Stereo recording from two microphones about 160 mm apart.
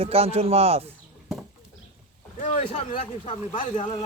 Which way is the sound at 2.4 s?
40° left (ahead or behind).